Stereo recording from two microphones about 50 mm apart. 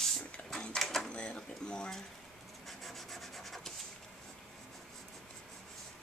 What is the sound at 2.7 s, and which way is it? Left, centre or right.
Rub, centre.